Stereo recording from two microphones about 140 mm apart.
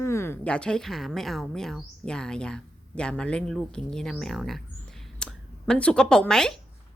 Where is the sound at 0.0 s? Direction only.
20° left (ahead or behind).